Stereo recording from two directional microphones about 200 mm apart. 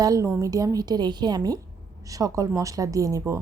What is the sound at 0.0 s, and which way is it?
A woman's voice, 15° right (ahead or behind).